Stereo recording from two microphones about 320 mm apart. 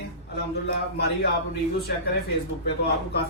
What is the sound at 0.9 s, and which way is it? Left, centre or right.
Speech, left.